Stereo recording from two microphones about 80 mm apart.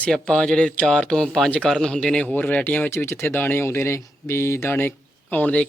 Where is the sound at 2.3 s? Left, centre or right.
Centre.